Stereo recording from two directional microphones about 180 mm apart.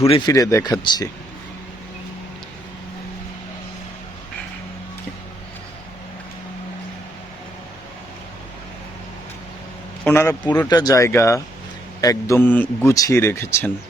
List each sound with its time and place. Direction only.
0.1 s speech: 20° left (ahead or behind)
10.0 s a man's voice: 10° left (ahead or behind)